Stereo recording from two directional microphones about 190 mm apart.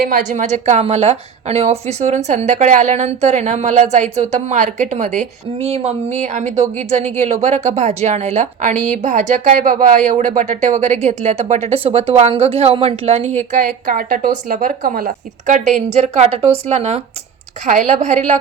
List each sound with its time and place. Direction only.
0.0 s a woman's voice: 45° right (ahead or behind)
13.5 s a woman's voice: 45° right (ahead or behind)